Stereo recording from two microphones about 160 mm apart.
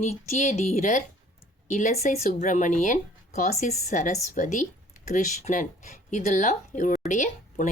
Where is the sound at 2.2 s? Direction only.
55° left (ahead or behind).